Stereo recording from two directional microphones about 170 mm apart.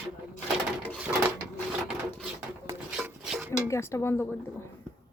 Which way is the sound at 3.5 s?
15° left (ahead or behind).